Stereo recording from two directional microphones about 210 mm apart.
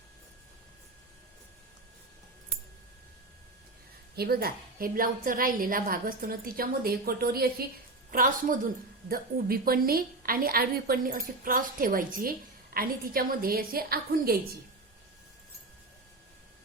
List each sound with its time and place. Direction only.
4.1 s a woman's voice: 45° right (ahead or behind)